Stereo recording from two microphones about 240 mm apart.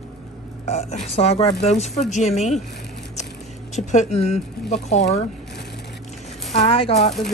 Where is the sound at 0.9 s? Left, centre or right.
Left.